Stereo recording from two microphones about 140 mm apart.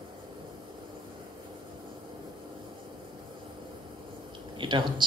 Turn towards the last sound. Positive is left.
turn(degrees=-35)  # may be behind; listen again after turning